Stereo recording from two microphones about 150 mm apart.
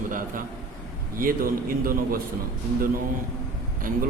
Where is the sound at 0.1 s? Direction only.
65° right (ahead or behind).